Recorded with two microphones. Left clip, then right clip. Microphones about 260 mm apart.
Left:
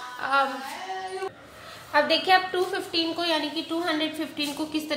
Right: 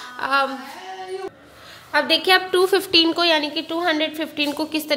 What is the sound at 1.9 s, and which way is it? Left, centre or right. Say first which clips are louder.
Speech: right 3 dB; right.